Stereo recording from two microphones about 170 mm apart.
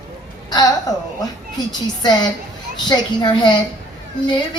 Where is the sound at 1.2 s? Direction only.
25° left (ahead or behind).